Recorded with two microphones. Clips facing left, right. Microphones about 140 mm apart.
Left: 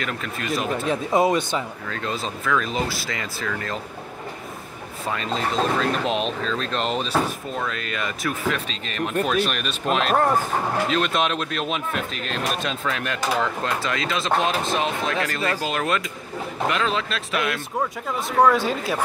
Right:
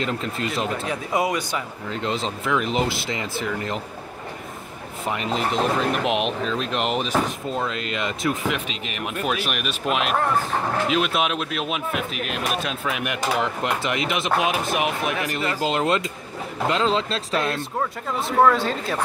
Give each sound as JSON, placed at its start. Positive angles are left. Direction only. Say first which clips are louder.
{"t": 0.0, "sound": "speech", "louder": "right 3 dB", "side_deg": -25}
{"t": 0.8, "sound": "speech", "louder": "left 7 dB", "side_deg": 25}
{"t": 1.9, "sound": "speech", "louder": "right 2 dB", "side_deg": -20}
{"t": 5.0, "sound": "speech", "louder": "right 1 dB", "side_deg": -20}
{"t": 10.9, "sound": "speech", "louder": "right 1 dB", "side_deg": -5}
{"t": 18.4, "sound": "a woman's voice", "louder": "even", "side_deg": 5}